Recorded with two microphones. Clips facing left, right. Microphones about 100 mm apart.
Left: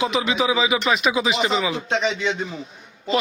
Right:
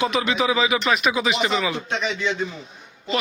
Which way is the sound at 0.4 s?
15° left (ahead or behind).